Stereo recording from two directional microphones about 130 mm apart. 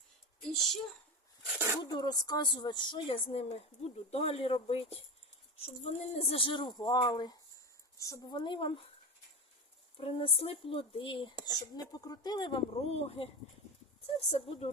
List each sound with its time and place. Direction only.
0.3 s speech: 5° left (ahead or behind)
1.5 s speech: 20° right (ahead or behind)
1.8 s speech: 30° left (ahead or behind)
10.0 s speech: 45° left (ahead or behind)
11.4 s speech: 30° left (ahead or behind); by 13.2 s 50° left (ahead or behind)
14.3 s speech: 50° left (ahead or behind)